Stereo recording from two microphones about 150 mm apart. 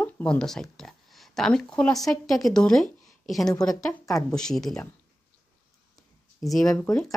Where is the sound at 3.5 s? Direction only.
25° left (ahead or behind).